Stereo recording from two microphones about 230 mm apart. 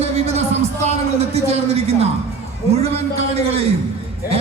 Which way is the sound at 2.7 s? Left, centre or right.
Right.